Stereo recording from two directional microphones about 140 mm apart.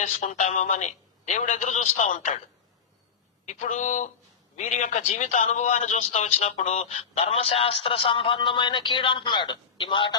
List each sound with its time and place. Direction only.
0.0 s a man's voice: 60° left (ahead or behind)
3.4 s a man's voice: 55° left (ahead or behind); by 10.2 s 35° left (ahead or behind)